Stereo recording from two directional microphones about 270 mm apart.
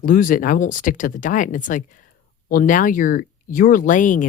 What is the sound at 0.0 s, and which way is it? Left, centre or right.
Speech, left.